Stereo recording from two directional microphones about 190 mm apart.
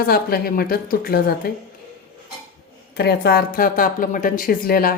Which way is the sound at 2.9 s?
60° left (ahead or behind).